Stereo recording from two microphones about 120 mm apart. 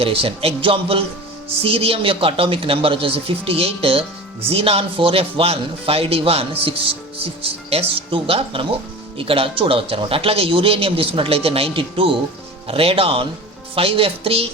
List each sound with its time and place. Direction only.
0.0 s speech: 50° right (ahead or behind)